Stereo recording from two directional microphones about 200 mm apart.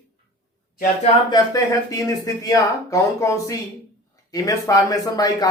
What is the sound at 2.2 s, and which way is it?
A man's voice, 15° left (ahead or behind).